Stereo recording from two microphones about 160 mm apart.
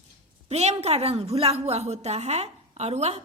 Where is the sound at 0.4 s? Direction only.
40° right (ahead or behind).